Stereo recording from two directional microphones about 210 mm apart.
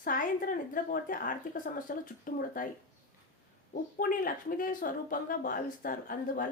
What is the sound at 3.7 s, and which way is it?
Speech, 40° left (ahead or behind).